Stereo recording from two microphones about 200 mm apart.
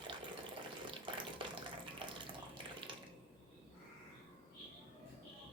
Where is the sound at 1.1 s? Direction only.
25° right (ahead or behind).